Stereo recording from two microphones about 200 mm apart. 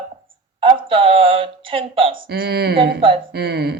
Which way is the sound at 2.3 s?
50° right (ahead or behind).